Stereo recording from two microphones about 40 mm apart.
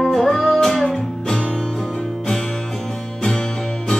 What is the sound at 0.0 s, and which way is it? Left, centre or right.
Music, centre.